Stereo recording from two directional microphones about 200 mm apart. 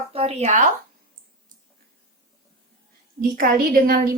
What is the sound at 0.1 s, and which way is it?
Speech, 30° right (ahead or behind).